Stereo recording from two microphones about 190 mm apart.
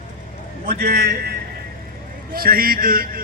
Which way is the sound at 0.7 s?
50° right (ahead or behind).